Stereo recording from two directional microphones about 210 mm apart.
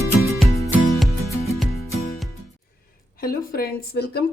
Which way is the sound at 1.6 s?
Centre (ahead or behind).